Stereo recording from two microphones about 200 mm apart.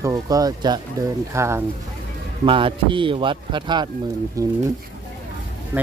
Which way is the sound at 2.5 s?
25° right (ahead or behind).